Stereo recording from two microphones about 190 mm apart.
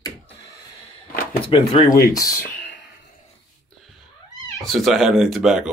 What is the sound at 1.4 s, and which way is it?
Speech, 25° left (ahead or behind).